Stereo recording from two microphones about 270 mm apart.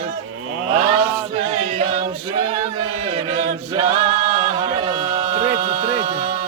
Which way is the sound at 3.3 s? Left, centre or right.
Right.